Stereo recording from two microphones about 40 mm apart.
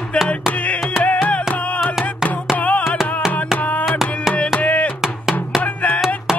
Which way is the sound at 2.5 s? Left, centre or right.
Left.